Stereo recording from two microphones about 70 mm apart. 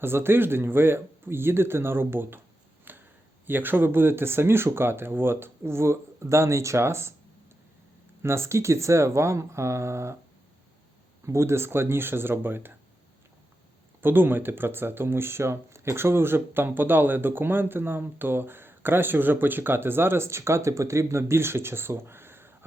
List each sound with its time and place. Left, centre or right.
0.0 s speech: right
2.9 s a sound: right
3.4 s speech: right
8.2 s speech: right
11.3 s speech: right
14.0 s speech: right